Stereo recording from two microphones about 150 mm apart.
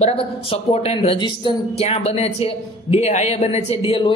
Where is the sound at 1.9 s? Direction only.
45° left (ahead or behind).